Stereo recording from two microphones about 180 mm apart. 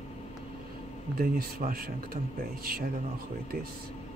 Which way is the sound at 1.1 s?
55° right (ahead or behind).